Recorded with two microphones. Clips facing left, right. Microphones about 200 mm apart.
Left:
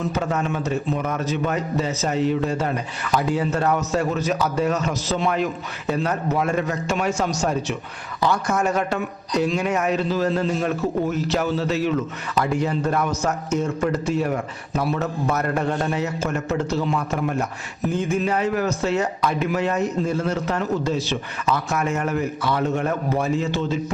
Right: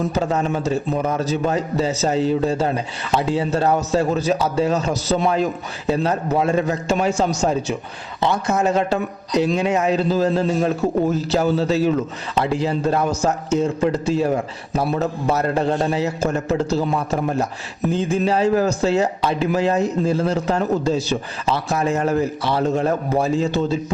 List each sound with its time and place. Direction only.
0.1 s a man's voice: 30° right (ahead or behind)